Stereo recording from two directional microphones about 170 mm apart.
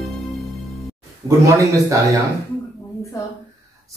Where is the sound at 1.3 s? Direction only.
20° right (ahead or behind).